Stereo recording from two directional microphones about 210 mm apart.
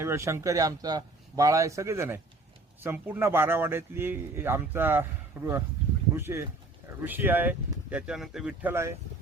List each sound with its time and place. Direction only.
0.0 s speech: 10° right (ahead or behind)